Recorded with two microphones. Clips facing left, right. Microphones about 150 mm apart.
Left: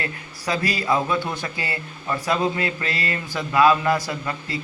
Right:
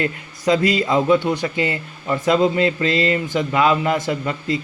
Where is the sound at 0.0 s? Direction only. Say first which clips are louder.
Right 8 dB; 20° right (ahead or behind).